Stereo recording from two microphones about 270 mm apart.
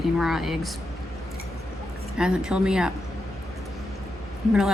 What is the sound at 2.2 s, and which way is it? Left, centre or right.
Speech, centre.